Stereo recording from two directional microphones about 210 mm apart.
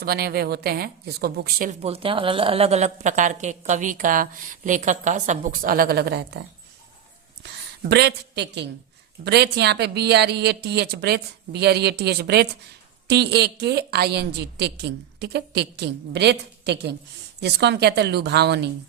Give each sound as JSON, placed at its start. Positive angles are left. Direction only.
{"t": 0.0, "sound": "a woman's voice", "side_deg": -45}
{"t": 1.8, "sound": "speech", "side_deg": -25}
{"t": 7.9, "sound": "a woman's voice", "side_deg": -50}